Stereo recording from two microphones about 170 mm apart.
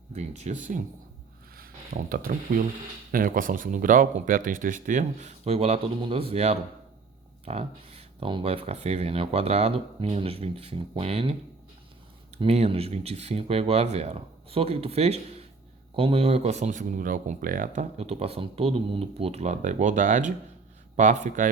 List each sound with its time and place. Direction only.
0.1 s speech: 40° right (ahead or behind)
12.4 s speech: 35° right (ahead or behind); by 17.8 s 55° right (ahead or behind)
17.9 s speech: 40° right (ahead or behind)